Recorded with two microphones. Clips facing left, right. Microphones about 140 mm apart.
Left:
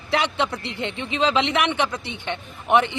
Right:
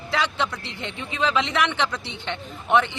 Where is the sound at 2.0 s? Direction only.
15° left (ahead or behind).